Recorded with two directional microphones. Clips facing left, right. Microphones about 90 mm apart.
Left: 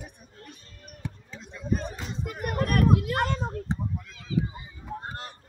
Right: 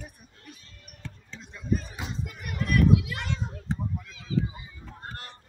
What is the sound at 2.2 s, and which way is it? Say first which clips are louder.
Speech: left 9 dB; 45° left (ahead or behind).